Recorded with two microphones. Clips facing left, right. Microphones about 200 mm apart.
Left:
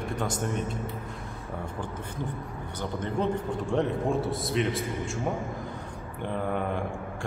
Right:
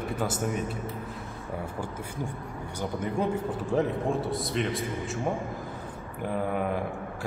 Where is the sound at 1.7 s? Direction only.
10° right (ahead or behind).